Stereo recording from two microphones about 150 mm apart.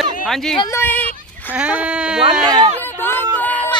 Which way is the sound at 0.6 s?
20° left (ahead or behind).